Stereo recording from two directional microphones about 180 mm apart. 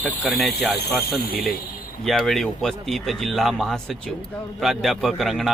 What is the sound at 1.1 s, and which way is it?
Speech, 55° left (ahead or behind).